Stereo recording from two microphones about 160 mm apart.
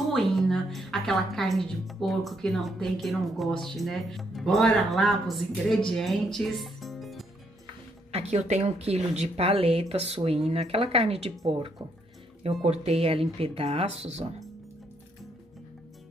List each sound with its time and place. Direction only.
0.1 s a woman's voice: centre (ahead or behind)
8.1 s speech: 40° right (ahead or behind)
12.6 s speech: 40° right (ahead or behind)